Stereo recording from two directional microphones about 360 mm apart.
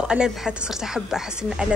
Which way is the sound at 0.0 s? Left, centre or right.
Centre.